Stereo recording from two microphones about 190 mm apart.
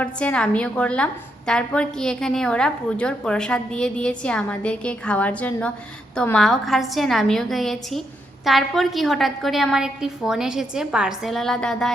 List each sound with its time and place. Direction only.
0.0 s a woman's voice: 5° left (ahead or behind)